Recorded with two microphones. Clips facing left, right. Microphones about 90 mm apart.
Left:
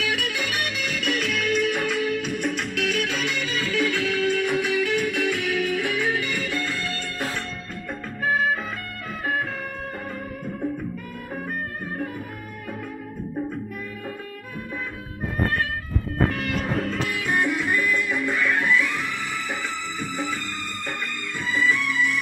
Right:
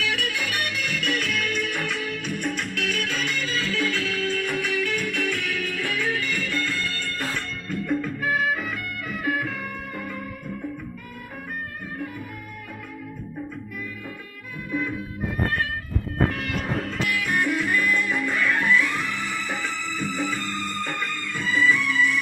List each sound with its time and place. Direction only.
0.3 s music: 15° left (ahead or behind)
3.2 s music: 5° left (ahead or behind)
7.7 s music: 30° left (ahead or behind)
17.1 s music: 25° left (ahead or behind)